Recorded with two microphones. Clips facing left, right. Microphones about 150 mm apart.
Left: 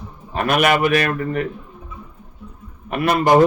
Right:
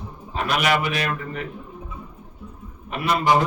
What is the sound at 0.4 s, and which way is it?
A man's voice, 55° left (ahead or behind).